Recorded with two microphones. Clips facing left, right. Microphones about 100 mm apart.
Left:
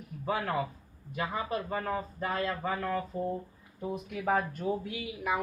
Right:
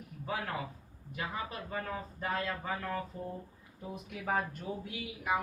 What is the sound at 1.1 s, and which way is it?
A man's voice, 55° left (ahead or behind).